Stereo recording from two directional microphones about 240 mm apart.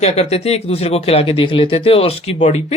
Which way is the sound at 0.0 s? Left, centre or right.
Left.